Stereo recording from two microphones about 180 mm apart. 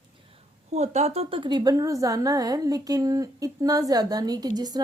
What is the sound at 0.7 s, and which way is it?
A woman's voice, 40° right (ahead or behind).